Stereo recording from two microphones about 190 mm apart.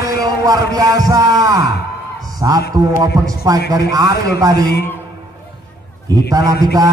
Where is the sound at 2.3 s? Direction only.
20° right (ahead or behind).